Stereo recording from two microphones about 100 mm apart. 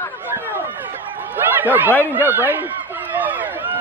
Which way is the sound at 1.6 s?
20° right (ahead or behind).